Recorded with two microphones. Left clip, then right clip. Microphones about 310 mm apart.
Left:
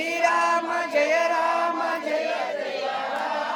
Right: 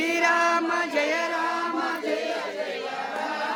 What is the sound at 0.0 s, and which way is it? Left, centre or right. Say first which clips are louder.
Music: even; centre.